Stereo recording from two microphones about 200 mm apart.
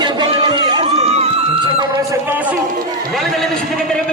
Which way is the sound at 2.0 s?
10° right (ahead or behind).